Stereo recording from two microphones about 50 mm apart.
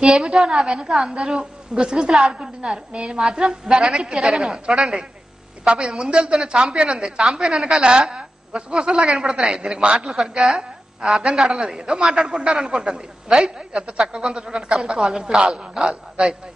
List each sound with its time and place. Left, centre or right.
0.0 s a woman's voice: centre
7.2 s a woman's voice: centre